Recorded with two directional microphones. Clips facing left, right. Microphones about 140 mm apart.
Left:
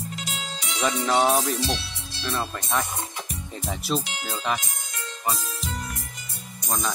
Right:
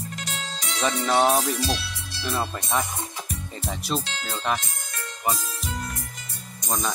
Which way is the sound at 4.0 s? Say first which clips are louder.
Even; 15° left (ahead or behind).